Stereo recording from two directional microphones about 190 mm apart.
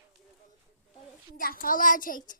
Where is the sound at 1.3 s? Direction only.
50° left (ahead or behind).